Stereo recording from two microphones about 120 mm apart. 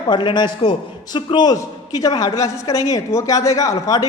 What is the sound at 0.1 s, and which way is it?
A man's voice, 40° left (ahead or behind).